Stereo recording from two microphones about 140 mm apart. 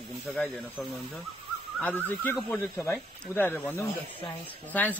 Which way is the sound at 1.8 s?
15° left (ahead or behind).